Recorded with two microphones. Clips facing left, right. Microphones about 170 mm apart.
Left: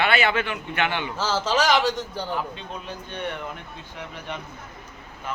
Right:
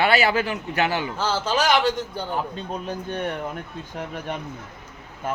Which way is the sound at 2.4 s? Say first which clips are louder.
Right 3 dB; 40° right (ahead or behind).